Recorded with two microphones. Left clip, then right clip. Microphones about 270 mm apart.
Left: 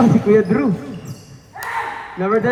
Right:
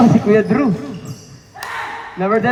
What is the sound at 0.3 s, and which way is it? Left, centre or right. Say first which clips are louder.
Speech: right 1 dB; right.